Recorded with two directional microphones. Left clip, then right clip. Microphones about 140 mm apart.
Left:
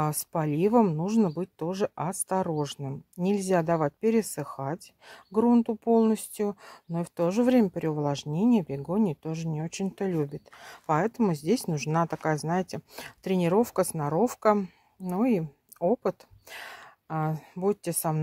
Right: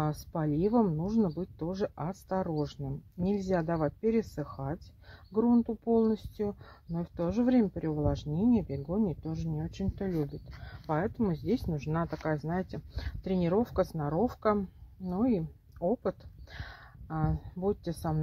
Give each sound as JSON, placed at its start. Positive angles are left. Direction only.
{"t": 0.0, "sound": "speech", "side_deg": 40}